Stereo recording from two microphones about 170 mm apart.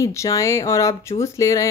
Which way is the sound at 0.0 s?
15° left (ahead or behind).